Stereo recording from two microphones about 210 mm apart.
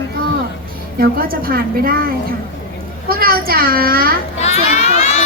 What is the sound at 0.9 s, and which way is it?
A woman's voice, 45° right (ahead or behind).